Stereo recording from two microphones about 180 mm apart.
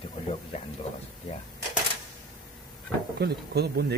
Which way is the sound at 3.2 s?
65° right (ahead or behind).